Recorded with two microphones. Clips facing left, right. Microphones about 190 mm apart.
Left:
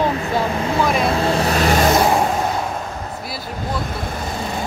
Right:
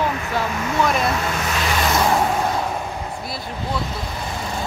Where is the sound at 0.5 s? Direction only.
30° left (ahead or behind).